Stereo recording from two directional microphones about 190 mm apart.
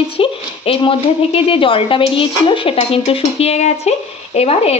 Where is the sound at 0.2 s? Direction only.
30° left (ahead or behind).